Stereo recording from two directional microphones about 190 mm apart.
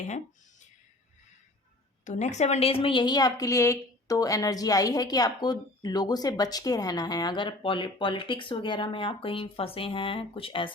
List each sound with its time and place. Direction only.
2.0 s a woman's voice: 40° left (ahead or behind)